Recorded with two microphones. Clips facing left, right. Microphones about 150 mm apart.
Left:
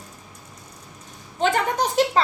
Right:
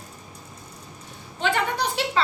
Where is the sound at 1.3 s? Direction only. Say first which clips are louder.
Left 3 dB; 40° left (ahead or behind).